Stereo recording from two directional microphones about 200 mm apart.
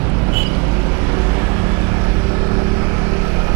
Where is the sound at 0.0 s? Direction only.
25° right (ahead or behind).